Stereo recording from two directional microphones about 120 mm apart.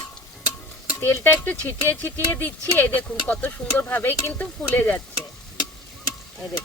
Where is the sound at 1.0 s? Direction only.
20° left (ahead or behind).